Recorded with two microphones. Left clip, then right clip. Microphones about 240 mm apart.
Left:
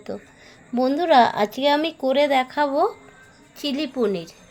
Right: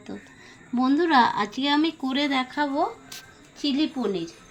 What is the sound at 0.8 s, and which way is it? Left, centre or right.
Speech, left.